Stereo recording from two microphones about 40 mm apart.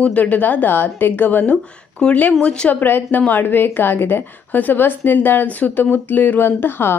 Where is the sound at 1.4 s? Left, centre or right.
Left.